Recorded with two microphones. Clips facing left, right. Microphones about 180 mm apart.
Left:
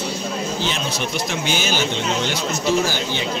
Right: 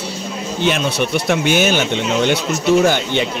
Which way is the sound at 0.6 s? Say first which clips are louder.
Right 7 dB; 60° right (ahead or behind).